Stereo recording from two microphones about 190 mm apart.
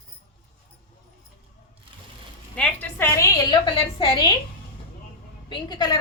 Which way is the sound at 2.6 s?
10° left (ahead or behind).